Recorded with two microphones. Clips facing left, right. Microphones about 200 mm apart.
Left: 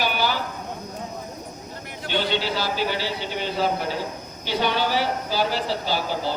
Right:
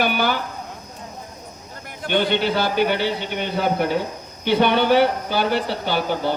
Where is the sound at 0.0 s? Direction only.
55° right (ahead or behind).